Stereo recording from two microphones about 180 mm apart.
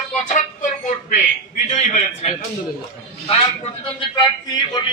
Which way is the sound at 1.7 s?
40° left (ahead or behind).